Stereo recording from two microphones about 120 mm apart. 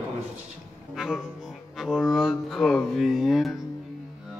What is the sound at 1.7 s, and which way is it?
Speech, centre (ahead or behind).